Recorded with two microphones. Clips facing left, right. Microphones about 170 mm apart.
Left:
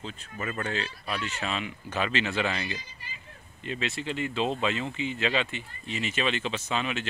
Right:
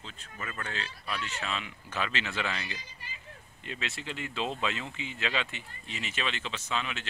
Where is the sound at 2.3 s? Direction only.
40° left (ahead or behind).